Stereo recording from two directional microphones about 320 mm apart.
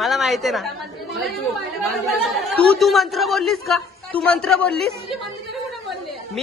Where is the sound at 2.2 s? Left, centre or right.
Centre.